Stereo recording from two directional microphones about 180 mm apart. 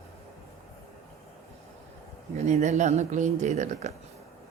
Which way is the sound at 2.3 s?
40° right (ahead or behind).